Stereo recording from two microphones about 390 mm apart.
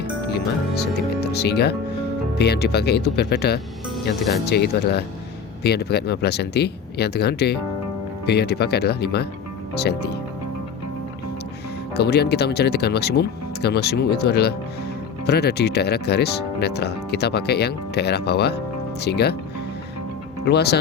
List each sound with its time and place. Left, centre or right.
0.0 s music: left
2.4 s speech: left
11.9 s speech: left
20.4 s speech: left